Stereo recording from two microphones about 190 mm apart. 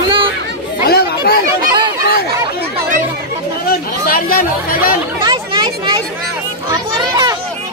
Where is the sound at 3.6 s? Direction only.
50° left (ahead or behind).